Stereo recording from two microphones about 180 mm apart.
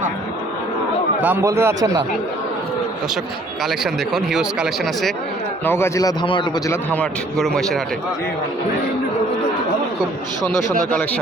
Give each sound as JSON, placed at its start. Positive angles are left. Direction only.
{"t": 1.2, "sound": "speech", "side_deg": -15}
{"t": 3.6, "sound": "speech", "side_deg": 0}
{"t": 5.6, "sound": "a man's voice", "side_deg": 15}
{"t": 6.7, "sound": "speech", "side_deg": 10}